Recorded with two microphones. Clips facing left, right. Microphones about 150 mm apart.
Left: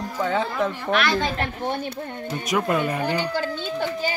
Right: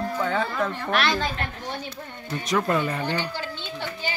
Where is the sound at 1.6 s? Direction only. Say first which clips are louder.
Left 6 dB; 55° left (ahead or behind).